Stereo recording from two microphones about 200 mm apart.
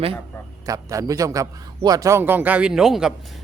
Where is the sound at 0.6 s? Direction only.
15° right (ahead or behind).